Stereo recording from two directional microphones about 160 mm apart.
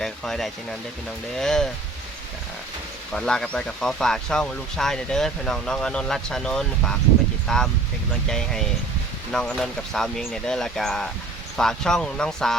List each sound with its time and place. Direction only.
0.0 s speech: centre (ahead or behind)
3.1 s speech: 5° left (ahead or behind)